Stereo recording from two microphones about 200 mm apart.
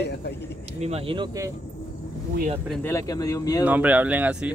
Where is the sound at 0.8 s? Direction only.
30° right (ahead or behind).